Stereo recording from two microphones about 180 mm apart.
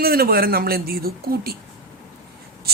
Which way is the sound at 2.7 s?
60° right (ahead or behind).